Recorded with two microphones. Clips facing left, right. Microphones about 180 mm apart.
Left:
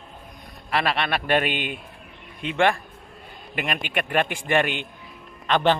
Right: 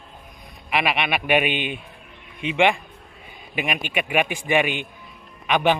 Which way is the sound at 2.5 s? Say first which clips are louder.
Right 1 dB; 15° right (ahead or behind).